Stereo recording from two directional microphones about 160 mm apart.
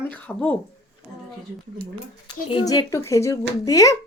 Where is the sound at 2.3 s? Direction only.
30° left (ahead or behind).